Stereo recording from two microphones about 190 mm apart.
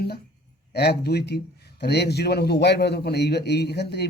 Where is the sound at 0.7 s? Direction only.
60° left (ahead or behind).